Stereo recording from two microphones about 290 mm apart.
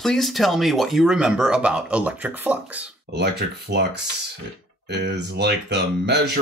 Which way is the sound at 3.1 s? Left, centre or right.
Right.